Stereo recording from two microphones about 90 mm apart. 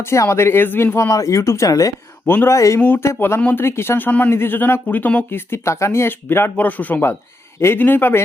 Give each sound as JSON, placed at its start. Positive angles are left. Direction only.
{"t": 0.0, "sound": "speech", "side_deg": 30}
{"t": 2.2, "sound": "speech", "side_deg": 25}
{"t": 2.8, "sound": "speech", "side_deg": 20}